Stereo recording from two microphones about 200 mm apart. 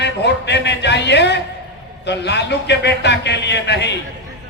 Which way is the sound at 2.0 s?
60° left (ahead or behind).